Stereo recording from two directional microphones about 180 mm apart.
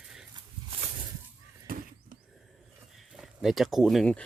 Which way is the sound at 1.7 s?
55° right (ahead or behind).